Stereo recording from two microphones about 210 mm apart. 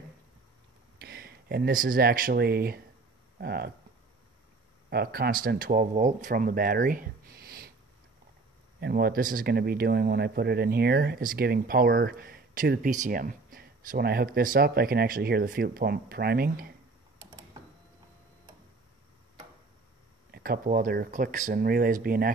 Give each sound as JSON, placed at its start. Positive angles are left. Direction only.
{"t": 1.0, "sound": "speech", "side_deg": -45}
{"t": 4.8, "sound": "speech", "side_deg": -45}
{"t": 8.8, "sound": "speech", "side_deg": -45}
{"t": 20.2, "sound": "speech", "side_deg": -45}